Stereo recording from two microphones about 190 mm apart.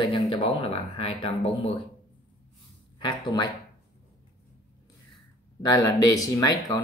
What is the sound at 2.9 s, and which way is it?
Speech, 25° left (ahead or behind).